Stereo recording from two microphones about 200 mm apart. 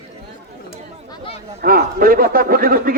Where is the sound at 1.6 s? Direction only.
45° right (ahead or behind).